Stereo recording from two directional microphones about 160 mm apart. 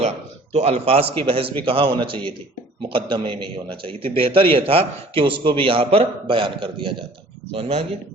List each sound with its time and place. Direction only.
0.5 s a man's voice: 40° right (ahead or behind)